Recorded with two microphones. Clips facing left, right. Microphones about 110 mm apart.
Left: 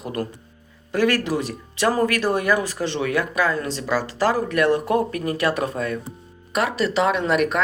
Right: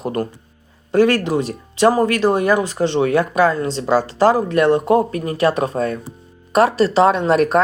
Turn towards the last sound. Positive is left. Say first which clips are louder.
# right 5 dB
turn(degrees=-35)  # may be behind; listen again after turning